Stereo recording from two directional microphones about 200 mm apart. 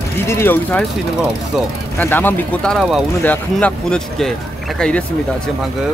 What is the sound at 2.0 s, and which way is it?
Speech, 10° left (ahead or behind).